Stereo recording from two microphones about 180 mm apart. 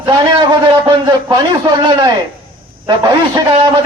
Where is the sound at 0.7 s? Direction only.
25° right (ahead or behind).